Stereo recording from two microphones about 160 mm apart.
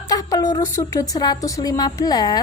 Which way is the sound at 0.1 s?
25° left (ahead or behind).